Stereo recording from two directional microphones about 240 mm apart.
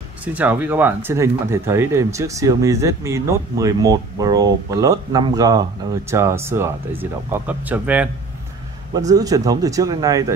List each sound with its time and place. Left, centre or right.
0.2 s speech: centre